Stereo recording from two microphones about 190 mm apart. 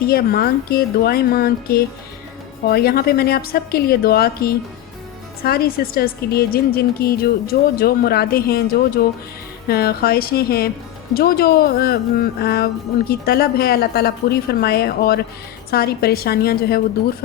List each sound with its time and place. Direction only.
0.0 s a woman's voice: 50° left (ahead or behind)